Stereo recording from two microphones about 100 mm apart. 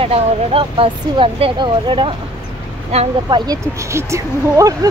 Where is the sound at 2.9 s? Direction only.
90° right.